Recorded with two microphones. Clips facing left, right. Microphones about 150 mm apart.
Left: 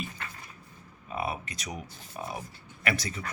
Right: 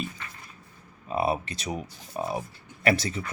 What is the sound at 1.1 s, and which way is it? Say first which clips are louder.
Speech: right 7 dB; 35° right (ahead or behind).